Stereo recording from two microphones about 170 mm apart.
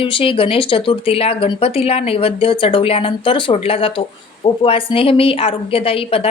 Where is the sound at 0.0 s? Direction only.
30° left (ahead or behind).